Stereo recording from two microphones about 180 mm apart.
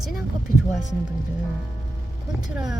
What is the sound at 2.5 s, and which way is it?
Speech, 5° right (ahead or behind).